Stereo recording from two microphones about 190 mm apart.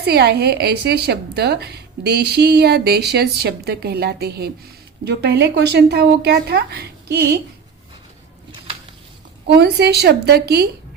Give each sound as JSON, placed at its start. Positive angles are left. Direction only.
{"t": 0.0, "sound": "a woman's voice", "side_deg": -60}
{"t": 9.5, "sound": "a woman's voice", "side_deg": -60}